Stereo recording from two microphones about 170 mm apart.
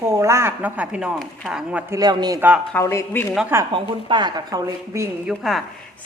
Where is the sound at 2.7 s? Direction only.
15° left (ahead or behind).